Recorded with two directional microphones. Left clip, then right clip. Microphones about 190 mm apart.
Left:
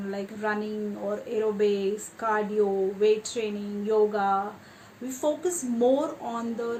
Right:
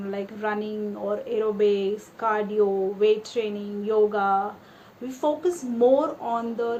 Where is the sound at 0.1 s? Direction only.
35° left (ahead or behind).